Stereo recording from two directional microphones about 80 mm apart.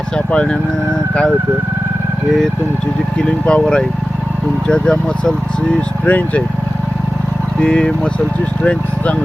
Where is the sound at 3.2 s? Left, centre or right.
Centre.